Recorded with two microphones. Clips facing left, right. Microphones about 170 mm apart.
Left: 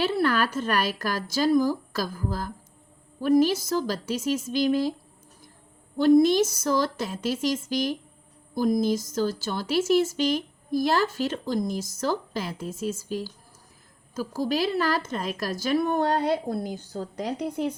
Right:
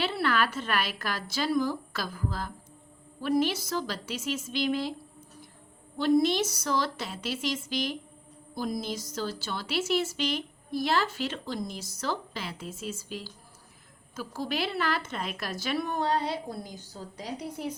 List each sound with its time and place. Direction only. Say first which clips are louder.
0.0 s a woman's voice: left 4 dB; 45° left (ahead or behind)
6.0 s speech: left 6 dB; 45° left (ahead or behind)